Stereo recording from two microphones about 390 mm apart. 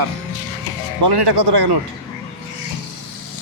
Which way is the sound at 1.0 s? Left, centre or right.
Right.